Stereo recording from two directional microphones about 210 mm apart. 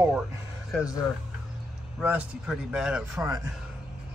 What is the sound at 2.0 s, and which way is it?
Speech, 5° right (ahead or behind).